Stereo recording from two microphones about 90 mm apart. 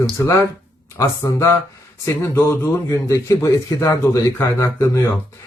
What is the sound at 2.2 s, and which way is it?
A man's voice, 25° left (ahead or behind).